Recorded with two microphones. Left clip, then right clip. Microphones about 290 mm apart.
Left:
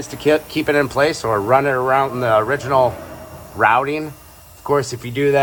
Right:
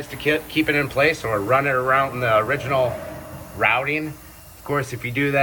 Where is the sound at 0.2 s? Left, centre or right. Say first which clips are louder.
Left 4 dB; centre.